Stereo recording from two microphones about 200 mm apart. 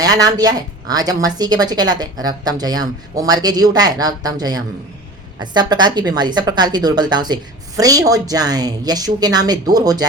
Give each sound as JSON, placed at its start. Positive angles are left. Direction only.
{"t": 0.0, "sound": "a woman's voice", "side_deg": -20}